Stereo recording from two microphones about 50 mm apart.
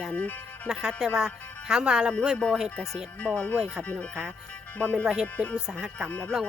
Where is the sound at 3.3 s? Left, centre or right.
Right.